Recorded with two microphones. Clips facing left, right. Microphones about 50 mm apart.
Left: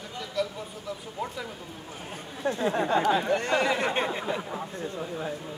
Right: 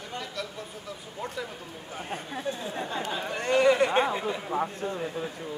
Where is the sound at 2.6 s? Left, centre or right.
Left.